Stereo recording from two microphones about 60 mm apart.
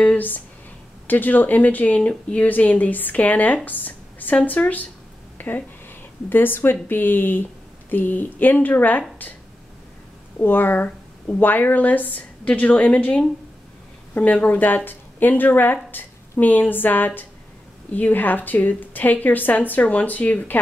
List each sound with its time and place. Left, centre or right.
0.0 s a woman's voice: left
10.4 s a woman's voice: left